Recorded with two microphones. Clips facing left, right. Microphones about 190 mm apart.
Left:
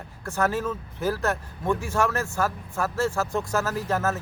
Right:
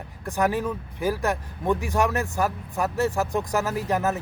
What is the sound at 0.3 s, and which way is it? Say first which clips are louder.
Speech: right 1 dB; 15° right (ahead or behind).